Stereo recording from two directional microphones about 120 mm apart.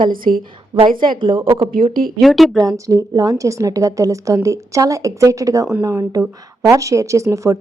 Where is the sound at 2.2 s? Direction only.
Centre (ahead or behind).